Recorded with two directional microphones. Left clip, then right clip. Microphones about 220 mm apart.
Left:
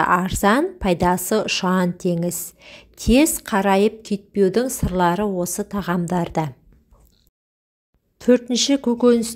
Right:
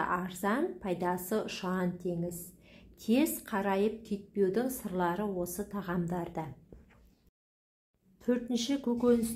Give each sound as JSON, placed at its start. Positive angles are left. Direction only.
{"t": 0.0, "sound": "speech", "side_deg": 40}
{"t": 8.2, "sound": "speech", "side_deg": 35}